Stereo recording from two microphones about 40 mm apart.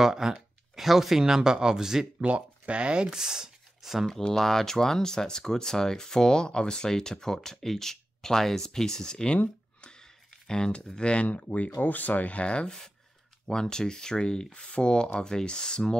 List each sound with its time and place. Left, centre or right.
0.0 s a sound: centre
0.8 s speech: centre
2.1 s speech: right; by 4.1 s centre
4.3 s speech: centre
9.8 s a sound: left
10.4 s speech: centre
11.2 s speech: left
11.8 s speech: left
13.5 s speech: centre